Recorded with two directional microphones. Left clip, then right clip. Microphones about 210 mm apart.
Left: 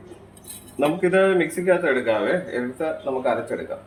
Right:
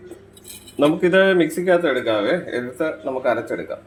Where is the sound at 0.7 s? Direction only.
50° right (ahead or behind).